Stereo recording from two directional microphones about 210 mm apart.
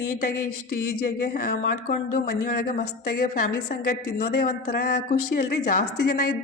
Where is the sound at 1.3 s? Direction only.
45° left (ahead or behind).